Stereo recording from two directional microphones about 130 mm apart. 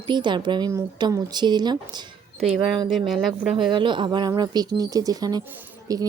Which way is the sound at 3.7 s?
40° right (ahead or behind).